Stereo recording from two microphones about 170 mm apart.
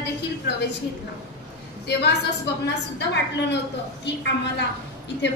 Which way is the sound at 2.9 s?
90° left.